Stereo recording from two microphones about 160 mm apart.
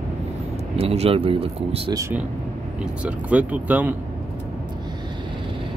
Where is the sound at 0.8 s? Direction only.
40° right (ahead or behind).